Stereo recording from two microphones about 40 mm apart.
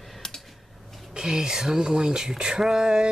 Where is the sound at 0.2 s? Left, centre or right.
Centre.